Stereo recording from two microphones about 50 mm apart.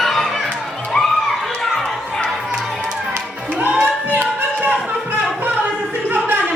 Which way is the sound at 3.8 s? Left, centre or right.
Right.